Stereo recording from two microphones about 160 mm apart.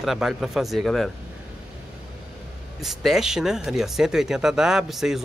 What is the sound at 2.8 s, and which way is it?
Speech, centre (ahead or behind).